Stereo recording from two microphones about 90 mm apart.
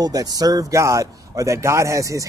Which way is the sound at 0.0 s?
45° right (ahead or behind).